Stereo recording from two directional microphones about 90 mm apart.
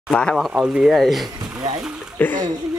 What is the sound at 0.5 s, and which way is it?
Speech, 10° right (ahead or behind).